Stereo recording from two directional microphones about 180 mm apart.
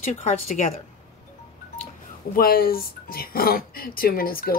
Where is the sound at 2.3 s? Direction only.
55° left (ahead or behind).